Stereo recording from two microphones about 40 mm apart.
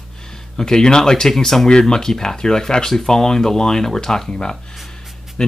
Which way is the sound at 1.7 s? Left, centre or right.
Centre.